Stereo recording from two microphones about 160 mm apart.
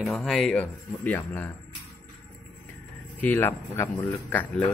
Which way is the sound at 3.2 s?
10° left (ahead or behind).